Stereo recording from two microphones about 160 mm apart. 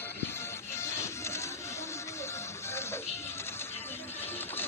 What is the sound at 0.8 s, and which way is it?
Music, 15° left (ahead or behind).